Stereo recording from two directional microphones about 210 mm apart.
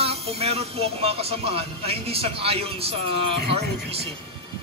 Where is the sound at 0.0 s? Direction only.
30° right (ahead or behind).